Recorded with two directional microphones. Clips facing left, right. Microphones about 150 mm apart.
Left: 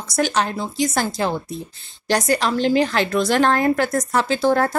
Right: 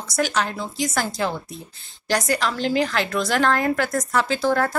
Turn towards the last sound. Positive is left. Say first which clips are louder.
# left 3 dB
turn(degrees=25)  # may be behind; listen again after turning